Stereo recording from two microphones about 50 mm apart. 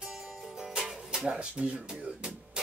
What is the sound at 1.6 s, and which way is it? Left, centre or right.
Speech, right.